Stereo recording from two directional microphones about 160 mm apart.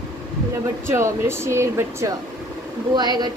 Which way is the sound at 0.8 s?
15° right (ahead or behind).